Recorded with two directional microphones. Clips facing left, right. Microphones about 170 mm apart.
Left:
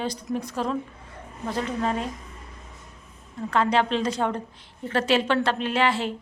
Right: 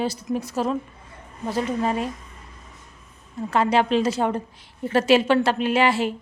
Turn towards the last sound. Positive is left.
turn(degrees=-10)  # may be behind; listen again after turning